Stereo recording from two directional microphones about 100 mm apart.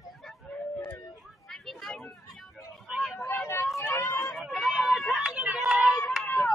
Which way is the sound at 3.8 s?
25° left (ahead or behind).